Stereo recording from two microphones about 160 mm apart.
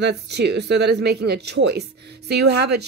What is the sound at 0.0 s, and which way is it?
Speech, 90° right.